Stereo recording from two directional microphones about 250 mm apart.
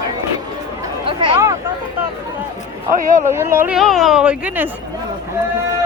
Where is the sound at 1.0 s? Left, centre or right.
Right.